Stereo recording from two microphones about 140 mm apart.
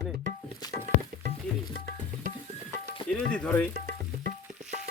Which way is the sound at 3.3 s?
10° left (ahead or behind).